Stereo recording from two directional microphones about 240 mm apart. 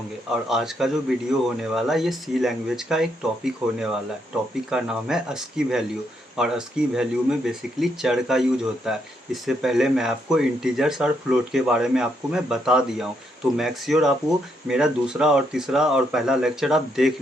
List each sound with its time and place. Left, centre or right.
0.4 s speech: centre